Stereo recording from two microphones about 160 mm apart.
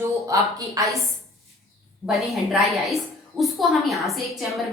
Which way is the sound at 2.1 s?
Centre (ahead or behind).